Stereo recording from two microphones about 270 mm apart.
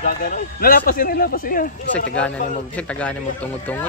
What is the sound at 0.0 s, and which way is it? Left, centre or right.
A man's voice, left.